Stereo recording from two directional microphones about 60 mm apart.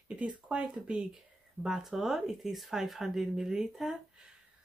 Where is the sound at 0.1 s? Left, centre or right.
Right.